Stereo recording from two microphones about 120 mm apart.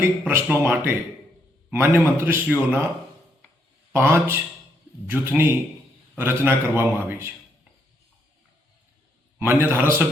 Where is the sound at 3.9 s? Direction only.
20° right (ahead or behind).